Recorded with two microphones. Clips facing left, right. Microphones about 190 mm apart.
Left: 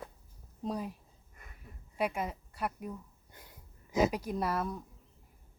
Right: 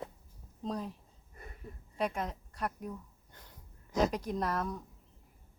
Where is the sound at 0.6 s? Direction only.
10° left (ahead or behind).